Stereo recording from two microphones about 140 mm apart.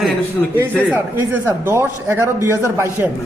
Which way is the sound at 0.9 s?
15° right (ahead or behind).